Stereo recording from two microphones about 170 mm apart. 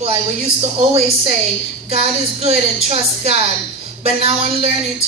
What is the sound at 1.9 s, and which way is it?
Speech, 35° right (ahead or behind).